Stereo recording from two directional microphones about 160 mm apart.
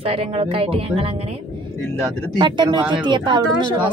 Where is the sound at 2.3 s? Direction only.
30° right (ahead or behind).